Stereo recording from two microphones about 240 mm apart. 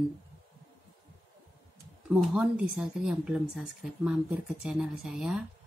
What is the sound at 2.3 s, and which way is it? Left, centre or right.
Speech, centre.